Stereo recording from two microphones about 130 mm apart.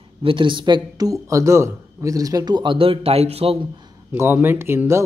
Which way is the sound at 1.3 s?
20° right (ahead or behind).